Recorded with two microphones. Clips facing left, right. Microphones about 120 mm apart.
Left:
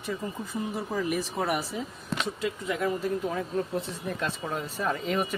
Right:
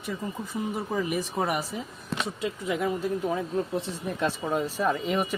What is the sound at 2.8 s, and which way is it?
A woman's voice, 15° right (ahead or behind).